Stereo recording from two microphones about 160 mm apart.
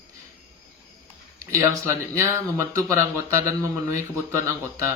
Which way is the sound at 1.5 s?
15° right (ahead or behind).